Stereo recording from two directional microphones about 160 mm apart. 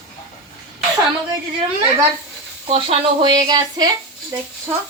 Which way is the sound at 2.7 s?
30° right (ahead or behind).